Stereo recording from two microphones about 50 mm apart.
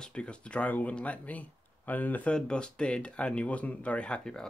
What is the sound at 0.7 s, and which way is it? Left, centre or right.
A man's voice, left.